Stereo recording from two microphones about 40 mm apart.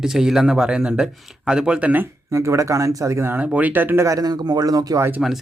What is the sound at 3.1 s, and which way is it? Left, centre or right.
Speech, right.